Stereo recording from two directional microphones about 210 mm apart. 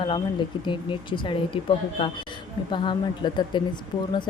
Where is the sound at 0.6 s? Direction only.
20° left (ahead or behind).